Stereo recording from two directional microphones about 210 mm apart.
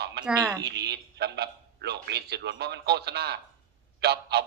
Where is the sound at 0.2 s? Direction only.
50° right (ahead or behind).